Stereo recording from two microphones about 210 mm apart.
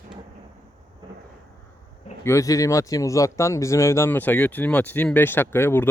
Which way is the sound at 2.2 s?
15° left (ahead or behind).